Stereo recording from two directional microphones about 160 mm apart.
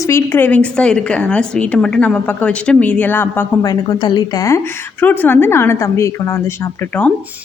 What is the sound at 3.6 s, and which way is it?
Speech, 25° left (ahead or behind).